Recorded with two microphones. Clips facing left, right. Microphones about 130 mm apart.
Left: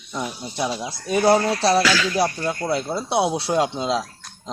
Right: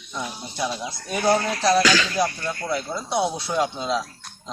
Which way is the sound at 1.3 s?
30° left (ahead or behind).